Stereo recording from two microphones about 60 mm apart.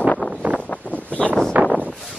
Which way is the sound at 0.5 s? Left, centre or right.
Left.